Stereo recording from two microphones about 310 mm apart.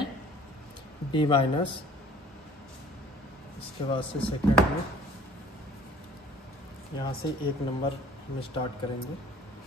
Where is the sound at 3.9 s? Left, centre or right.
Centre.